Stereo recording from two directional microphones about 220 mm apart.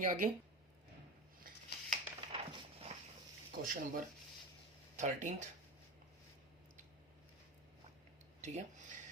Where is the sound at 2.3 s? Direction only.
25° right (ahead or behind).